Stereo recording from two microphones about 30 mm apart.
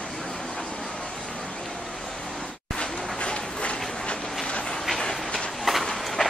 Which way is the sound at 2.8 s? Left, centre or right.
Left.